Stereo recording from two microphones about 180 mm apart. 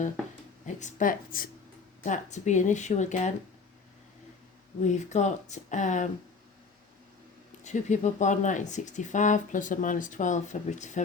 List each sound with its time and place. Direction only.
0.6 s speech: 40° left (ahead or behind)
4.9 s speech: 40° left (ahead or behind)
7.6 s speech: 40° left (ahead or behind)